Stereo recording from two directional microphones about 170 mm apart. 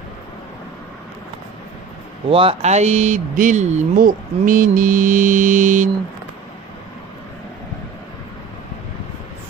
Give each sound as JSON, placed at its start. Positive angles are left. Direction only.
{"t": 2.2, "sound": "speech", "side_deg": -35}